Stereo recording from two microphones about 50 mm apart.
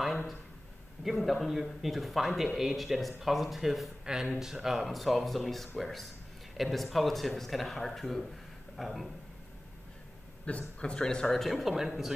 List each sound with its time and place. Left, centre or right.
1.0 s speech: centre
10.4 s a man's voice: left
11.4 s speech: centre